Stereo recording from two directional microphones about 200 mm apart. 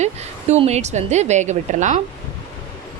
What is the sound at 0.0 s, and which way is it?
Speech, 35° right (ahead or behind).